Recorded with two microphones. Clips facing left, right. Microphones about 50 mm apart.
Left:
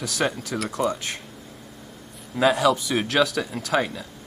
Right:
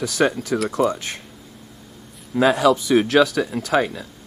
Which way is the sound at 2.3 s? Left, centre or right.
Centre.